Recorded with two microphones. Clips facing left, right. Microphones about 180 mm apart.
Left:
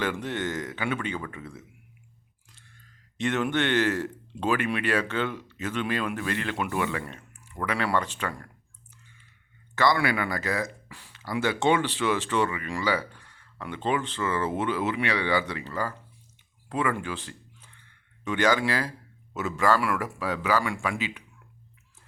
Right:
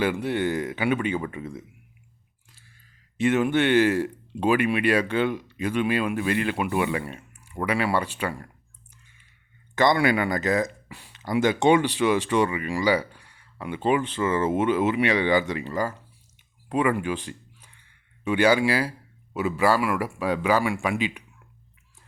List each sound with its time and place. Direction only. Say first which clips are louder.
0.0 s speech: right 5 dB; 10° right (ahead or behind)
2.5 s speech: left 1 dB; 5° right (ahead or behind)
9.7 s speech: right 4 dB; 20° right (ahead or behind)